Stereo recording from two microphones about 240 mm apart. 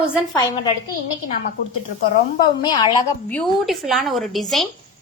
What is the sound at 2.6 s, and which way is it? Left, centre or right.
Speech, centre.